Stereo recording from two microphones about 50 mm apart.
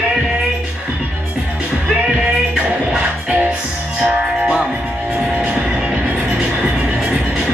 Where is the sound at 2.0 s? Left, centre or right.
Centre.